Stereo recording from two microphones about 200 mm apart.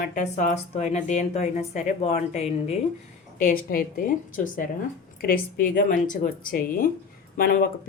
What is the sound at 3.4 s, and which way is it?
A woman's voice, 45° left (ahead or behind).